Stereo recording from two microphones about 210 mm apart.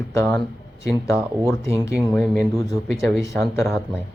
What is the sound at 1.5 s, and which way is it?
Speech, 15° left (ahead or behind).